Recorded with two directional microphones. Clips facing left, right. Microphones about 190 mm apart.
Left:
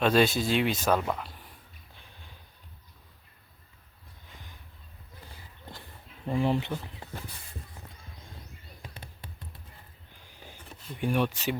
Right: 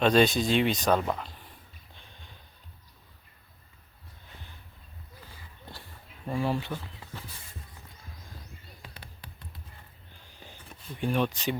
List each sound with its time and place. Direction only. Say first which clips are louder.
0.0 s speech: right 1 dB; 5° left (ahead or behind)
6.2 s speech: left 2 dB; 20° left (ahead or behind)
10.2 s a sound: left 1 dB; 10° left (ahead or behind)
11.0 s speech: even; 10° left (ahead or behind)